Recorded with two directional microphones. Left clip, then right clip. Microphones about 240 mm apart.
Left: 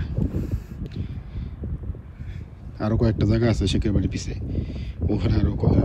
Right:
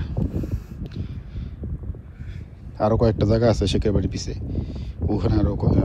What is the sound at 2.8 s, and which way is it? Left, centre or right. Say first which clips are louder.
Speech: right 5 dB; centre.